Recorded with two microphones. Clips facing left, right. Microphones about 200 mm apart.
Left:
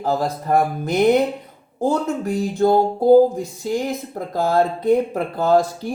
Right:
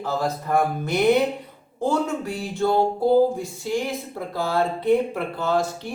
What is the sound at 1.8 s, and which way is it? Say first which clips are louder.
Music: left 3 dB; 40° left (ahead or behind).